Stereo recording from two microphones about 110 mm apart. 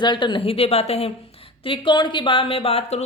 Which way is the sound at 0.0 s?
45° left (ahead or behind).